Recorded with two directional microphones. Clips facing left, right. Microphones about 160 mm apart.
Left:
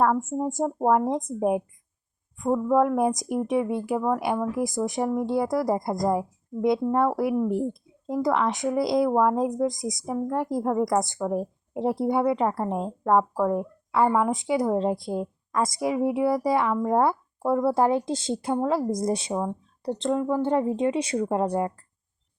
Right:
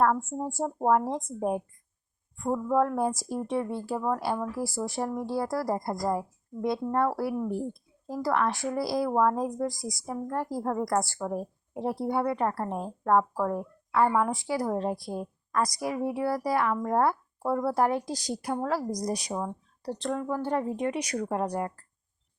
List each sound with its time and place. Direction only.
0.0 s a woman's voice: 15° left (ahead or behind)